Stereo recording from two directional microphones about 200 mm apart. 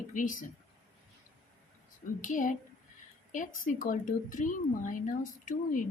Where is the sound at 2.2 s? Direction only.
40° left (ahead or behind).